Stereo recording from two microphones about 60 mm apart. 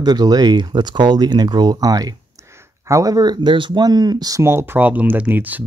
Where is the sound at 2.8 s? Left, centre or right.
Right.